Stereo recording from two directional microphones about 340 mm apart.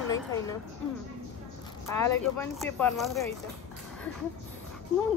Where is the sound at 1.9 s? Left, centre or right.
Centre.